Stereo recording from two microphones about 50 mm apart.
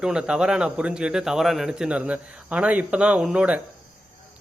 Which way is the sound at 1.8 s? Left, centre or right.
Right.